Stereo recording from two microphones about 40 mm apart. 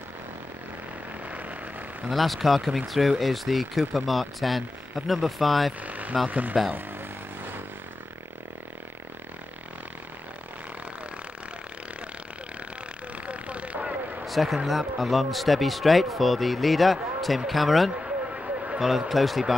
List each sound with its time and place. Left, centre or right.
2.0 s speech: centre
5.9 s vehicle: right
6.2 s speech: right
13.3 s vehicle: right
14.2 s a sound: centre
14.7 s speech: centre
18.0 s a sound: right
18.8 s speech: centre